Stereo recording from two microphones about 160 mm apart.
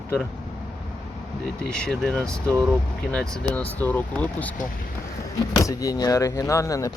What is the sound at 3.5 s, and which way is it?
Speech, 10° left (ahead or behind).